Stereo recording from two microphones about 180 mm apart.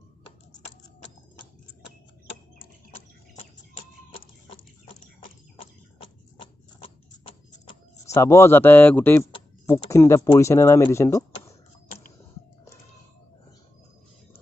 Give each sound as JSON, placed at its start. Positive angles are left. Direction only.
{"t": 2.9, "sound": "music", "side_deg": 35}
{"t": 5.9, "sound": "a sound", "side_deg": 30}
{"t": 8.1, "sound": "speech", "side_deg": 15}